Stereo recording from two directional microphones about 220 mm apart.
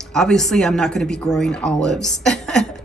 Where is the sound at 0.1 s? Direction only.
Centre (ahead or behind).